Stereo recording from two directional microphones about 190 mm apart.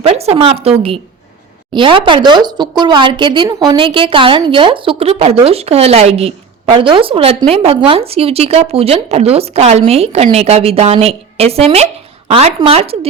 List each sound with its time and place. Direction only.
0.0 s speech: 35° right (ahead or behind)
1.7 s a woman's voice: 25° right (ahead or behind)